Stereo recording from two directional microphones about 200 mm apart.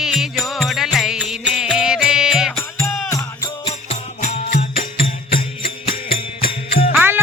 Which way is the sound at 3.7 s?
30° left (ahead or behind).